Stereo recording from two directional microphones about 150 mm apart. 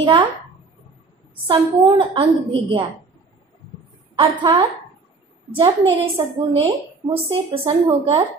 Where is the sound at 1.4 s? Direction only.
30° right (ahead or behind).